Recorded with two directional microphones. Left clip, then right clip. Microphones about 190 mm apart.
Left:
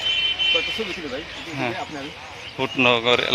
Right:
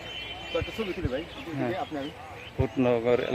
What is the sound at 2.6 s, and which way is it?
Speech, 10° left (ahead or behind).